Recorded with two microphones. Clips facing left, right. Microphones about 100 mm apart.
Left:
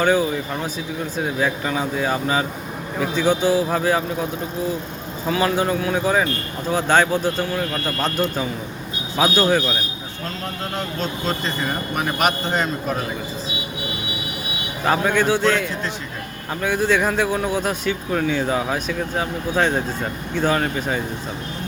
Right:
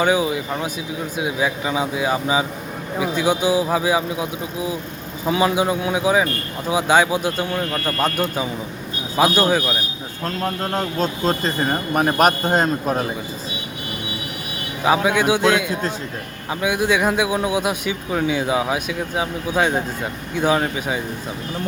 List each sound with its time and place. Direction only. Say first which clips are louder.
0.0 s speech: even; 10° right (ahead or behind)
10.4 s speech: right 5 dB; 40° right (ahead or behind)
14.8 s speech: right 1 dB; 10° right (ahead or behind)